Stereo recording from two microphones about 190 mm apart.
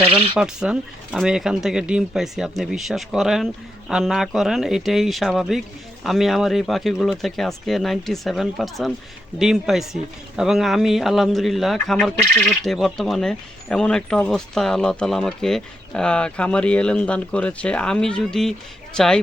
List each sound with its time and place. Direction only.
0.0 s speech: 30° right (ahead or behind)
0.3 s a man's voice: 5° right (ahead or behind)